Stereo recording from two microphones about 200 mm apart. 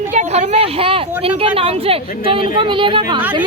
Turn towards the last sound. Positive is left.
turn(degrees=-25)  # may be behind; listen again after turning